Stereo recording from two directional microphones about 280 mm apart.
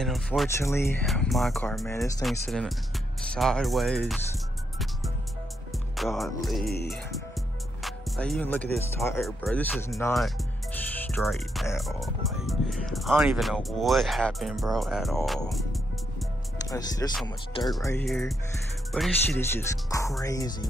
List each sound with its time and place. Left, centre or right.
0.0 s speech: centre
5.9 s speech: centre
6.6 s music: left
7.8 s speech: centre
15.5 s music: centre
16.7 s speech: centre